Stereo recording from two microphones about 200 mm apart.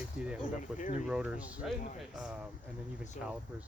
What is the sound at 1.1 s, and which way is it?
Speech, 5° right (ahead or behind).